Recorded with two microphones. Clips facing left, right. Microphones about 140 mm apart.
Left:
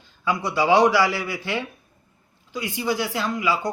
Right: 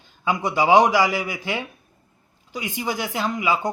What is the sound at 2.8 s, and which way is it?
Speech, 15° right (ahead or behind).